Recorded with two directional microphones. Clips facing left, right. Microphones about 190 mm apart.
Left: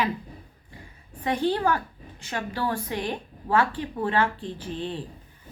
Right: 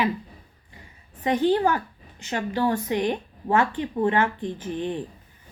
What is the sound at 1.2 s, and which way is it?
A woman's voice, 15° right (ahead or behind).